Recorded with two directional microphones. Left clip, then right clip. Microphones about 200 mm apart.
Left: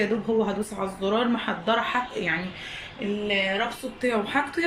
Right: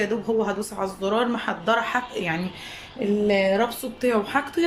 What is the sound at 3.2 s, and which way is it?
Speech, 25° right (ahead or behind).